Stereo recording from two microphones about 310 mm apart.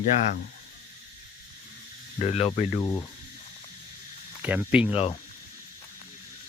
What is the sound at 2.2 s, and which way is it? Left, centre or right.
Speech, centre.